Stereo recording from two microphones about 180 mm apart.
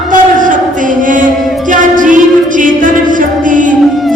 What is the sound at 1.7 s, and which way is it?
Music, 45° right (ahead or behind).